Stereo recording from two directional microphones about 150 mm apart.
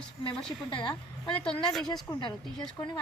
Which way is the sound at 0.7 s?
35° left (ahead or behind).